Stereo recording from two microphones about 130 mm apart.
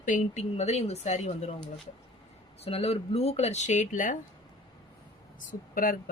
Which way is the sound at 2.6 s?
50° left (ahead or behind).